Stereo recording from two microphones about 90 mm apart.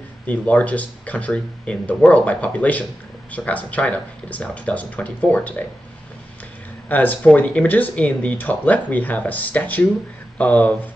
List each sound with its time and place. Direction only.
0.3 s speech: 15° left (ahead or behind)
6.9 s speech: 20° left (ahead or behind)